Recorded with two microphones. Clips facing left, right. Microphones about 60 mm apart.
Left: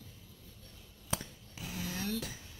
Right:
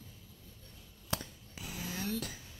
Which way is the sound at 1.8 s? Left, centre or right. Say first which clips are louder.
Left 1 dB; right.